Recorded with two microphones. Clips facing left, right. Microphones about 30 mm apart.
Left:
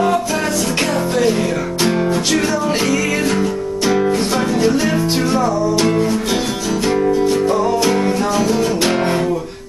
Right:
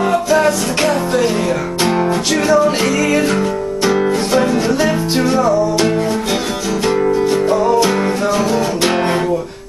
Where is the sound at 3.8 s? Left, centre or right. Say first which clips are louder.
Right 1 dB; right.